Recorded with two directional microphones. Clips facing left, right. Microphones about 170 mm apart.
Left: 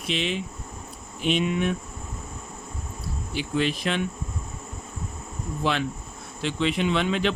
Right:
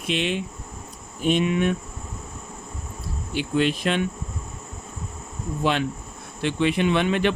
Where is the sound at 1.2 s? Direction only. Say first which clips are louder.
Right 3 dB; 55° right (ahead or behind).